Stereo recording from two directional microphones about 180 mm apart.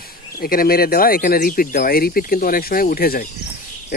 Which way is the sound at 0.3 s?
55° left (ahead or behind).